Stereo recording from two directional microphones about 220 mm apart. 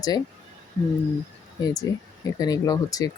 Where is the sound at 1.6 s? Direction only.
15° left (ahead or behind).